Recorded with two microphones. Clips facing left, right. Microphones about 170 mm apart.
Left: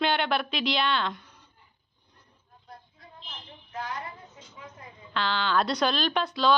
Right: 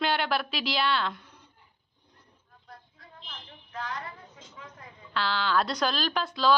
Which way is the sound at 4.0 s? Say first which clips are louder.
Left 1 dB; 25° left (ahead or behind).